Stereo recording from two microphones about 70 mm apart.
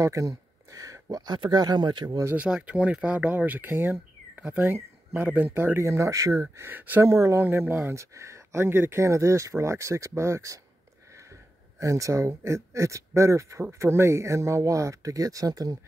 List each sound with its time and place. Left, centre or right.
0.0 s speech: right
2.3 s speech: centre; by 6.7 s right
6.7 s speech: right
7.0 s speech: right
7.3 s speech: right
11.8 s speech: right